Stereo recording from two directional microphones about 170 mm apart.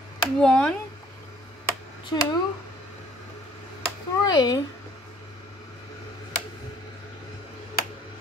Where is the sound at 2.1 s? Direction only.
25° left (ahead or behind).